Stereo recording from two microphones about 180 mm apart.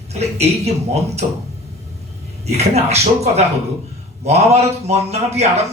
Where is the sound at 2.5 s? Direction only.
35° right (ahead or behind).